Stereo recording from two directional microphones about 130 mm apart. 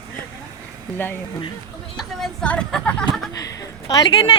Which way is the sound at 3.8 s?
35° left (ahead or behind).